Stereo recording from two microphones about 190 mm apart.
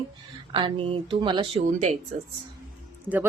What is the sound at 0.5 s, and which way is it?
A woman's voice, 25° right (ahead or behind).